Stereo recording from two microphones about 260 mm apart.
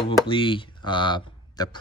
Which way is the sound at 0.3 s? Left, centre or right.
Centre.